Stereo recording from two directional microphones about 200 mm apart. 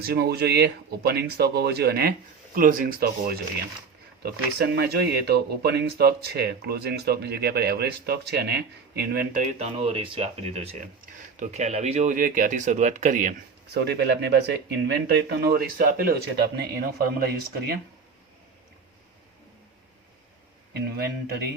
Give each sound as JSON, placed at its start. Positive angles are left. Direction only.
{"t": 0.0, "sound": "speech", "side_deg": -55}
{"t": 9.6, "sound": "speech", "side_deg": -30}
{"t": 13.7, "sound": "speech", "side_deg": -55}
{"t": 21.2, "sound": "speech", "side_deg": -55}